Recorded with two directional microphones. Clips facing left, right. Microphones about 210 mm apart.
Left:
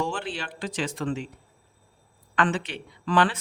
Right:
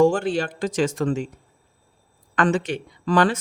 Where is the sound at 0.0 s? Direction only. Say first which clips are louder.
Right 12 dB; 45° right (ahead or behind).